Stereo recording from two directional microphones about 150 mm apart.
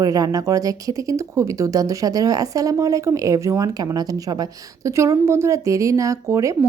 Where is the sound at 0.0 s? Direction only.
25° right (ahead or behind).